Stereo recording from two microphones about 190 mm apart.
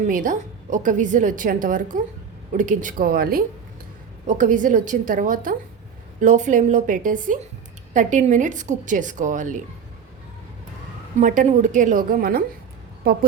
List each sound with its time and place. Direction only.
0.1 s a woman's voice: 45° right (ahead or behind)
11.2 s a woman's voice: 40° right (ahead or behind)